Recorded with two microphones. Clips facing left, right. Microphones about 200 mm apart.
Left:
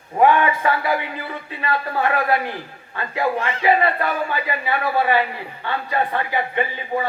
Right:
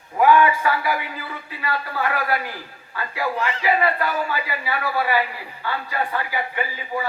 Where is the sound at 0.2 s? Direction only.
25° left (ahead or behind).